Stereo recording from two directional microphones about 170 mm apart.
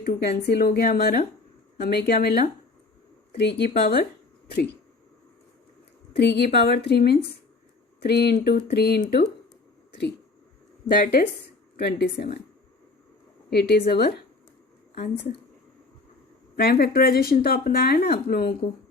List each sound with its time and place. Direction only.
0.0 s a woman's voice: 70° left (ahead or behind)
6.1 s a woman's voice: 75° left (ahead or behind)
10.8 s a woman's voice: 65° left (ahead or behind)
13.5 s a woman's voice: 70° left (ahead or behind)
15.1 s a woman's voice: 80° left
16.6 s speech: 65° left (ahead or behind)